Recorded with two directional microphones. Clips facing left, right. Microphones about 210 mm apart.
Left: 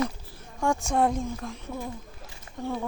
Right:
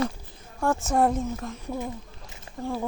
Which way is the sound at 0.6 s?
5° right (ahead or behind).